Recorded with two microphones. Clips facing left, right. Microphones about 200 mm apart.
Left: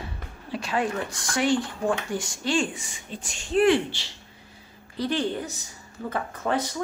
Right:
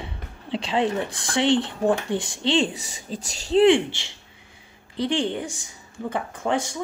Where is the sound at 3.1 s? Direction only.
35° right (ahead or behind).